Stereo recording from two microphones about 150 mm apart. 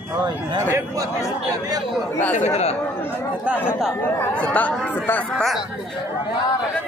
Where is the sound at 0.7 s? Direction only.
25° right (ahead or behind).